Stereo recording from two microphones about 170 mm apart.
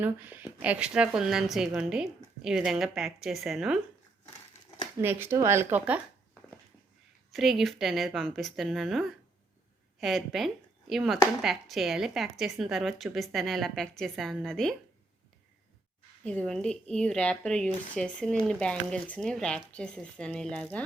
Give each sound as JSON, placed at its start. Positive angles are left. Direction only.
{"t": 0.0, "sound": "a woman's voice", "side_deg": -10}
{"t": 4.9, "sound": "speech", "side_deg": -10}
{"t": 7.3, "sound": "a woman's voice", "side_deg": 0}
{"t": 16.2, "sound": "a woman's voice", "side_deg": 5}